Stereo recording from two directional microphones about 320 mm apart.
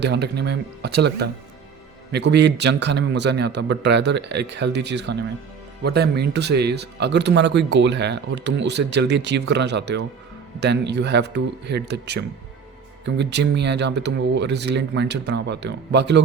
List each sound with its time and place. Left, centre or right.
0.0 s speech: right